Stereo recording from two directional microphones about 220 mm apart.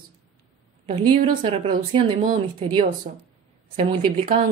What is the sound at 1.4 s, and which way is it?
Speech, 25° right (ahead or behind).